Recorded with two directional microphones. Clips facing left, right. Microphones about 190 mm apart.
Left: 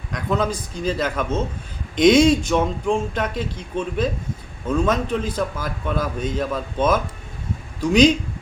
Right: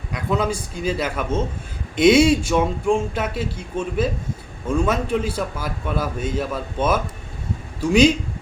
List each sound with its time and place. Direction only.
0.1 s a man's voice: 10° right (ahead or behind)